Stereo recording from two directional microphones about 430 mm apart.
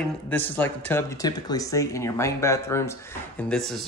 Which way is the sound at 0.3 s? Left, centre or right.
Centre.